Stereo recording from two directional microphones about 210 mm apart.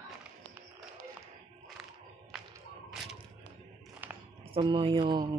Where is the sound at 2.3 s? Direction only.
Centre (ahead or behind).